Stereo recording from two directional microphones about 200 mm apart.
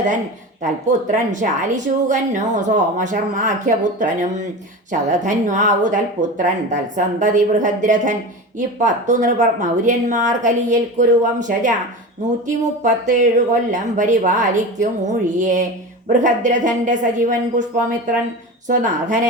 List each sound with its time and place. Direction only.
0.6 s a woman's voice: 40° right (ahead or behind)
12.8 s a woman's voice: 40° right (ahead or behind)
18.7 s a woman's voice: 40° right (ahead or behind)